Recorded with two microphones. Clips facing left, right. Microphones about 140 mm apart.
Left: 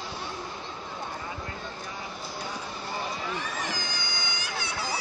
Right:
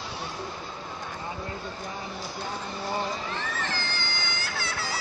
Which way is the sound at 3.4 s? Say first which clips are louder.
Right 1 dB; 15° left (ahead or behind).